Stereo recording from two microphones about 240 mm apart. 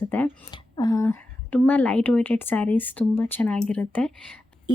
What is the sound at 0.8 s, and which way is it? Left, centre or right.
A woman's voice, centre.